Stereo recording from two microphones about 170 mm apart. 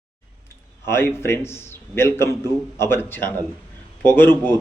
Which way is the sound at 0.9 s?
15° left (ahead or behind).